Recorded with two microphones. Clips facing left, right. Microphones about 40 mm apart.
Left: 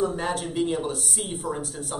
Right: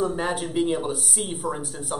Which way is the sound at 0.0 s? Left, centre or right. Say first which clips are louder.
Right 1 dB; centre.